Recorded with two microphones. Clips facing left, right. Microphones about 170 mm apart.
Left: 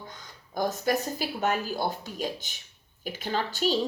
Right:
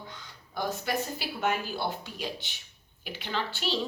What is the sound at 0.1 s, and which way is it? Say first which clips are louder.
Speech: left 3 dB; 45° left (ahead or behind).